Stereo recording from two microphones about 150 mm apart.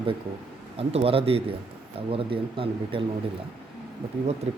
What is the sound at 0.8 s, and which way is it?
Speech, 40° right (ahead or behind).